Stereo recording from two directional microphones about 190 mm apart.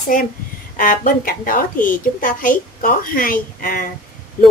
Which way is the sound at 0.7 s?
45° left (ahead or behind).